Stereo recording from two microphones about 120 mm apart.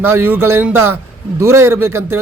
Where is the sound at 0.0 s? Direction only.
20° right (ahead or behind).